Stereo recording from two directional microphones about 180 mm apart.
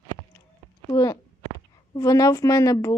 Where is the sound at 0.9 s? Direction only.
20° left (ahead or behind).